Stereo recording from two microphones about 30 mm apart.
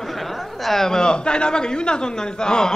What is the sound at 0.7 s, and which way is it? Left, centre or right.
Speech, centre.